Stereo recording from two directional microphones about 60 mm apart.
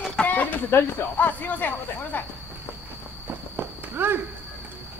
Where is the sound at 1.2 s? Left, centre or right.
Left.